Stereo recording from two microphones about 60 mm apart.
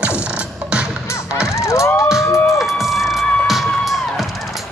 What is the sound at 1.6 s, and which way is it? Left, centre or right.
Music, left.